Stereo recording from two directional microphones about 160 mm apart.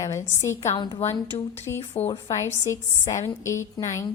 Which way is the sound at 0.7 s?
30° left (ahead or behind).